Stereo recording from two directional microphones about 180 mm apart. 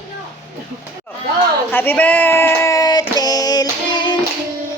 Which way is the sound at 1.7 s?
10° left (ahead or behind).